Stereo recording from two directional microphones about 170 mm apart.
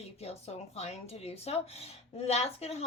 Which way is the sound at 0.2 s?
40° left (ahead or behind).